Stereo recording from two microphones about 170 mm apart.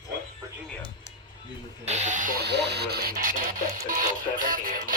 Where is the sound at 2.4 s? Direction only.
80° right; by 4.9 s 55° right (ahead or behind).